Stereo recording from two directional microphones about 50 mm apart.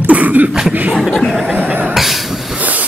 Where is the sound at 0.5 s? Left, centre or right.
Centre.